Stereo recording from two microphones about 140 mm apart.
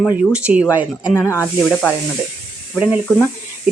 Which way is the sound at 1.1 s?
20° left (ahead or behind).